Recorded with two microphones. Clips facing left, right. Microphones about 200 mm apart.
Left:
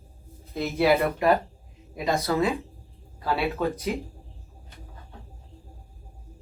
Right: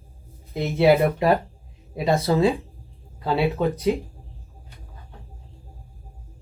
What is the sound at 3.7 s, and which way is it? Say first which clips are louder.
Speech: right 6 dB; 30° right (ahead or behind).